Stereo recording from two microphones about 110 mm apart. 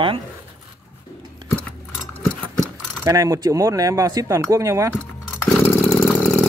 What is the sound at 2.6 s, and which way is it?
Speech, 30° right (ahead or behind).